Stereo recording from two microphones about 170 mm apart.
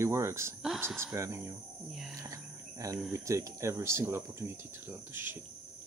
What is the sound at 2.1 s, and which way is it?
Cricket, 20° right (ahead or behind).